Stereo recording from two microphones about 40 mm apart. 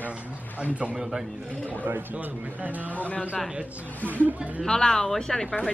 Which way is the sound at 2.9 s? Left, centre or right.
Left.